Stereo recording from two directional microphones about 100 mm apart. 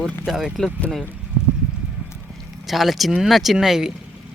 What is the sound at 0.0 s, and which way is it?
Speech, centre (ahead or behind).